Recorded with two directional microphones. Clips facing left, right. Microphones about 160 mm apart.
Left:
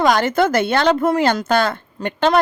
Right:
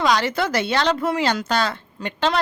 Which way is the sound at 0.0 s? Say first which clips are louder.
Left 5 dB; 50° left (ahead or behind).